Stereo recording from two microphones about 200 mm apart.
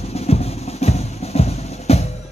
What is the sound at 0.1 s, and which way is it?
Music, 30° left (ahead or behind).